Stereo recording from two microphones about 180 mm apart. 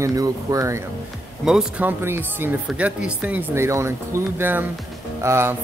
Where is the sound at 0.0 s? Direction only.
20° right (ahead or behind).